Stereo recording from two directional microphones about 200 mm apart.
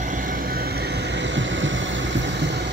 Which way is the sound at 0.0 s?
40° right (ahead or behind).